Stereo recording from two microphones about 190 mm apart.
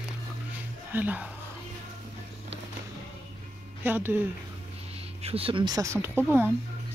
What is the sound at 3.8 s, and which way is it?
Speech, 10° right (ahead or behind).